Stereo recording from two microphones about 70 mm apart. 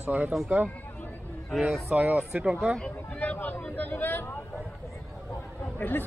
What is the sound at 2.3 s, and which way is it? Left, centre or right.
Speech, centre.